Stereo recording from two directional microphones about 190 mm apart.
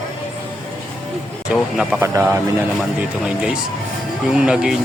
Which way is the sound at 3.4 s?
5° right (ahead or behind).